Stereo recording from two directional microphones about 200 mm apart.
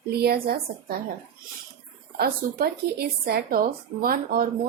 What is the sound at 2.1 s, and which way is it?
A woman's voice, 50° right (ahead or behind).